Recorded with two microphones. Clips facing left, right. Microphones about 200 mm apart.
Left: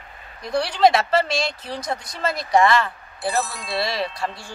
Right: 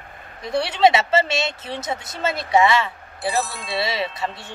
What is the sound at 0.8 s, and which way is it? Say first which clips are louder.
Speech: even; 5° right (ahead or behind).